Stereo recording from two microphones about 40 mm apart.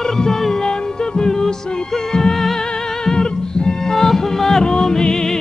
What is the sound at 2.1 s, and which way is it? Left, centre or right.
Music, centre.